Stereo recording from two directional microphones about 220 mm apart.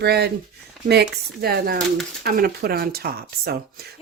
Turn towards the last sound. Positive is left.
turn(degrees=-45)  # may be behind; listen again after turning